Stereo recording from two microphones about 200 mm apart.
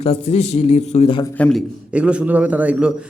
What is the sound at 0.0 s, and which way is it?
A man's voice, 30° left (ahead or behind).